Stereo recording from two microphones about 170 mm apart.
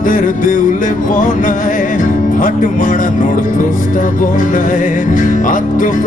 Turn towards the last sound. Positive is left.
turn(degrees=50)  # may be behind; listen again after turning